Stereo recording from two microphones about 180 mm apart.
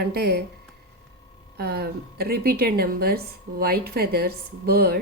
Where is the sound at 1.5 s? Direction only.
60° right (ahead or behind).